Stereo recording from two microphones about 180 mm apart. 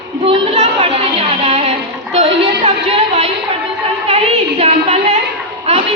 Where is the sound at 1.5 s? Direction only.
30° right (ahead or behind).